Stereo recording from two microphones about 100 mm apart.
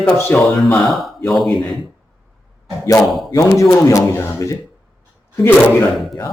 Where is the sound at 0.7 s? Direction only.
Centre (ahead or behind).